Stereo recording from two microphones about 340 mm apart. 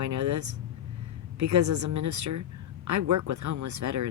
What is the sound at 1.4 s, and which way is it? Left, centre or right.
Speech, right.